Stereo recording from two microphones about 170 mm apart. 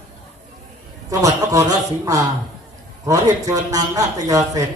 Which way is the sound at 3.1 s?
20° right (ahead or behind).